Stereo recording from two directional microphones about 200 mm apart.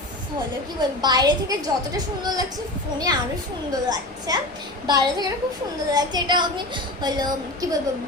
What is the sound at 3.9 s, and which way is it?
A woman's voice, 20° right (ahead or behind).